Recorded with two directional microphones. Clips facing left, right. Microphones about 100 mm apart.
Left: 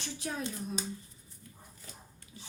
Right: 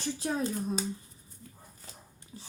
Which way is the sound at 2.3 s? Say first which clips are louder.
Right 4 dB; 35° right (ahead or behind).